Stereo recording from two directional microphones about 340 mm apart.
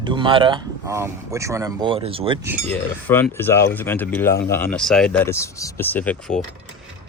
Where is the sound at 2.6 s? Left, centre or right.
Centre.